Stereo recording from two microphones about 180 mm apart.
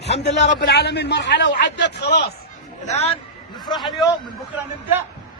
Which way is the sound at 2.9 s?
35° left (ahead or behind).